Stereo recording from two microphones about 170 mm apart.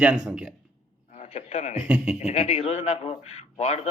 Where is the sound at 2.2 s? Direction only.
40° left (ahead or behind).